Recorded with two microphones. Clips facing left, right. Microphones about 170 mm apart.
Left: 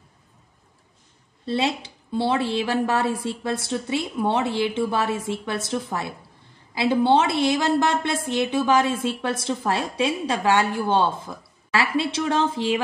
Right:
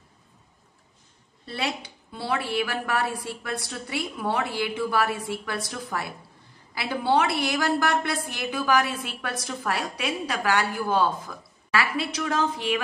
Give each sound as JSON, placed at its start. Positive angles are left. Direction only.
{"t": 1.4, "sound": "a woman's voice", "side_deg": 25}